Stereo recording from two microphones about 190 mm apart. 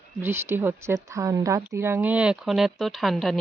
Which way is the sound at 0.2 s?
10° right (ahead or behind).